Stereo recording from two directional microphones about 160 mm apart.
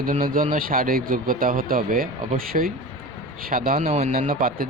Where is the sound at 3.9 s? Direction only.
45° right (ahead or behind).